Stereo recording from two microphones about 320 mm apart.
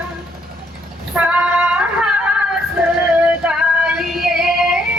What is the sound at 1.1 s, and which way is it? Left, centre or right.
Female singing, centre.